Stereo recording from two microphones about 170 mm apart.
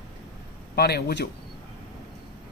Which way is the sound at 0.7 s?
70° left (ahead or behind).